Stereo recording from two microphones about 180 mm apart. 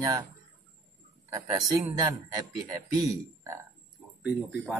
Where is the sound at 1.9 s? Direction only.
20° right (ahead or behind).